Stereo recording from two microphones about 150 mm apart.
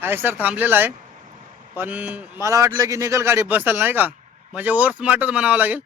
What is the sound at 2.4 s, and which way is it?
A man's voice, 20° right (ahead or behind).